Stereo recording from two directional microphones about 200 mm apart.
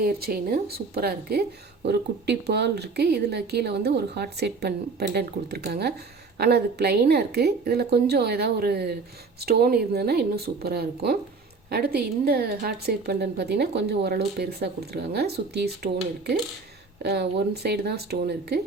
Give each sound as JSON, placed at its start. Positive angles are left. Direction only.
{"t": 0.0, "sound": "a woman's voice", "side_deg": -50}
{"t": 17.0, "sound": "a woman's voice", "side_deg": -55}